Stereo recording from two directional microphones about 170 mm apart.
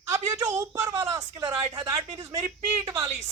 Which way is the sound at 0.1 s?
20° right (ahead or behind).